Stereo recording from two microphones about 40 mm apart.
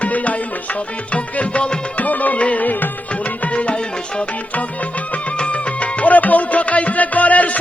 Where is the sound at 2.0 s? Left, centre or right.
Left.